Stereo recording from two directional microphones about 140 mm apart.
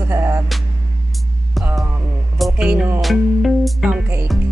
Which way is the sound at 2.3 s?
5° right (ahead or behind).